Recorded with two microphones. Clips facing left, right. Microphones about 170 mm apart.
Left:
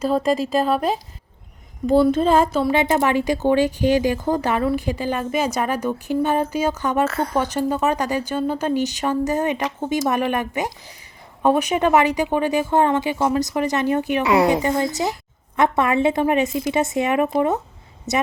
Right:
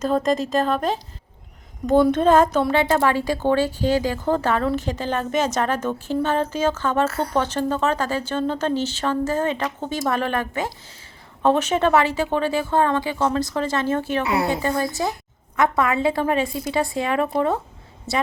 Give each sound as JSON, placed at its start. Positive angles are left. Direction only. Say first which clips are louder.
{"t": 0.0, "sound": "a woman's voice", "louder": "left 1 dB", "side_deg": 5}
{"t": 7.1, "sound": "a woman's voice", "louder": "left 2 dB", "side_deg": 90}
{"t": 7.3, "sound": "a woman's voice", "louder": "even", "side_deg": 10}
{"t": 14.3, "sound": "a woman's voice", "louder": "left 8 dB", "side_deg": 90}
{"t": 14.6, "sound": "a woman's voice", "louder": "left 2 dB", "side_deg": 20}